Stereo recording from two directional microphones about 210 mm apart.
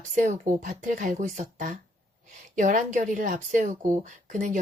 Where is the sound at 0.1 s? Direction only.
40° right (ahead or behind).